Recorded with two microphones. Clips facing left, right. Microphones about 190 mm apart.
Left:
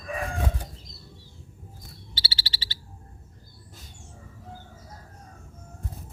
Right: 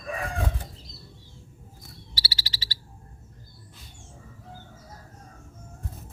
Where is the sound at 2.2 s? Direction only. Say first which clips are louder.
Even; 30° left (ahead or behind).